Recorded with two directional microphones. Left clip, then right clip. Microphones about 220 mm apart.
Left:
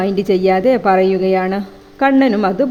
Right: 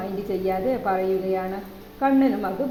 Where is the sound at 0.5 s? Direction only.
45° left (ahead or behind).